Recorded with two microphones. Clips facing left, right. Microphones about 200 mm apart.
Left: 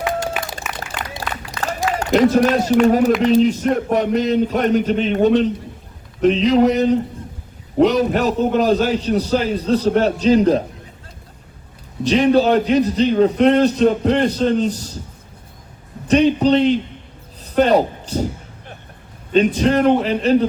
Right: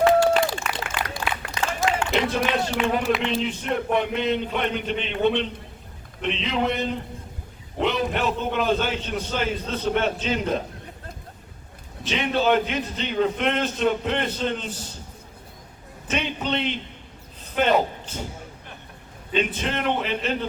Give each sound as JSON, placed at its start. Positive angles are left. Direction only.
{"t": 0.0, "sound": "applause", "side_deg": 15}
{"t": 1.6, "sound": "a sound", "side_deg": -20}
{"t": 2.0, "sound": "a man's voice", "side_deg": 40}
{"t": 12.0, "sound": "a man's voice", "side_deg": 35}
{"t": 16.0, "sound": "a man's voice", "side_deg": 35}
{"t": 19.5, "sound": "a man's voice", "side_deg": 40}